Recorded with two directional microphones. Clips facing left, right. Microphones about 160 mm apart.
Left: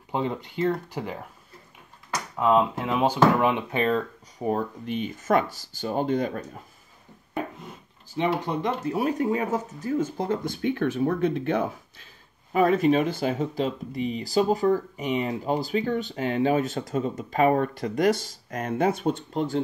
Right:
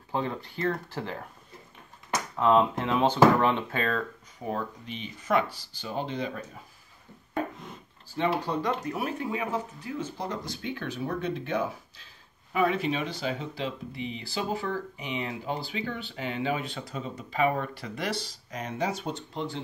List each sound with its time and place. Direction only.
0.1 s speech: 20° left (ahead or behind)
2.3 s speech: 5° left (ahead or behind)
4.5 s speech: 50° left (ahead or behind)
8.4 s speech: 20° left (ahead or behind); by 12.1 s 55° left (ahead or behind)
12.5 s speech: 45° left (ahead or behind)